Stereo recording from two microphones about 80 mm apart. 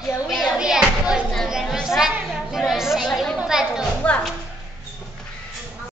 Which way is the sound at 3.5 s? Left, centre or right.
Centre.